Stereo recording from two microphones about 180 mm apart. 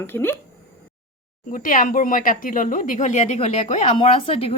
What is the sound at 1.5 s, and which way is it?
Speech, 50° left (ahead or behind).